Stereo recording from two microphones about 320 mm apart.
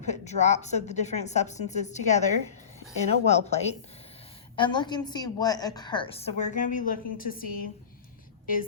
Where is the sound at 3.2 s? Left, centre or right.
Centre.